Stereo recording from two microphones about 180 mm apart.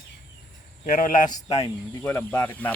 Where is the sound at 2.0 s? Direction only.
10° left (ahead or behind).